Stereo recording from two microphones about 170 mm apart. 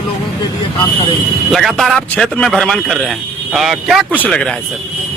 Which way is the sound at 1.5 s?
Centre (ahead or behind).